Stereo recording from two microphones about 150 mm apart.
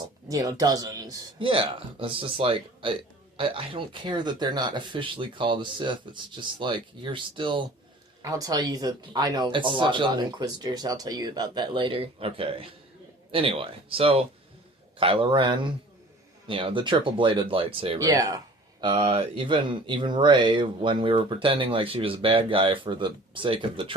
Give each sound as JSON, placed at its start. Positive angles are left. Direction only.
{"t": 0.3, "sound": "speech", "side_deg": -25}
{"t": 1.4, "sound": "speech", "side_deg": -35}
{"t": 18.0, "sound": "speech", "side_deg": -25}
{"t": 18.8, "sound": "speech", "side_deg": -35}